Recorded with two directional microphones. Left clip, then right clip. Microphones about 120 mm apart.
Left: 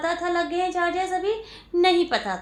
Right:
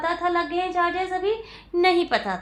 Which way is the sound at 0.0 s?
35° right (ahead or behind).